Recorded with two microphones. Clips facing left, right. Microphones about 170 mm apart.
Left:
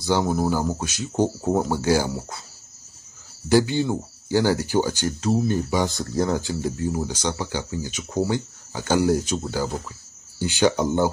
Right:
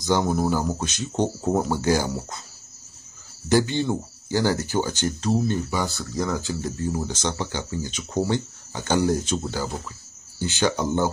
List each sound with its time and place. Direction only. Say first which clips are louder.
0.0 s speech: even; 10° left (ahead or behind)
3.4 s speech: left 2 dB; 10° left (ahead or behind)
6.1 s speech: left 3 dB; 30° left (ahead or behind)
6.6 s speech: left 2 dB; 10° left (ahead or behind)